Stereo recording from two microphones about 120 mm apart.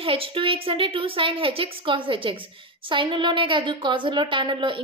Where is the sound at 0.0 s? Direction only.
50° right (ahead or behind).